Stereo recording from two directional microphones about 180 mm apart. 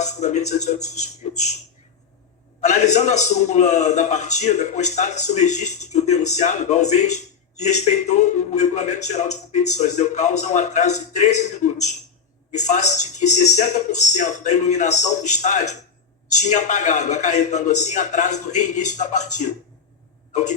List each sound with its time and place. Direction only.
0.0 s a man's voice: 40° left (ahead or behind)
2.6 s a man's voice: 40° left (ahead or behind)
20.3 s a sound: 45° left (ahead or behind)